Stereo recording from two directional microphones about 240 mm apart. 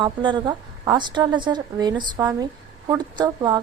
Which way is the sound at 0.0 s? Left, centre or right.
Centre.